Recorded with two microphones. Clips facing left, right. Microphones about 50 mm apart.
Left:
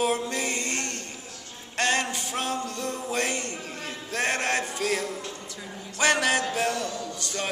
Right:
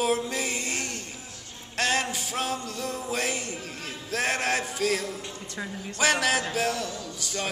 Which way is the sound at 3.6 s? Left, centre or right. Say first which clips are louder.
Left 1 dB; centre.